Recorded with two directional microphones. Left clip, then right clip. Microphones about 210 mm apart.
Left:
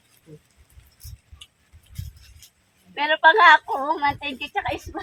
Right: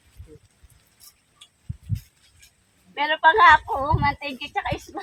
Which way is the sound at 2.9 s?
20° left (ahead or behind).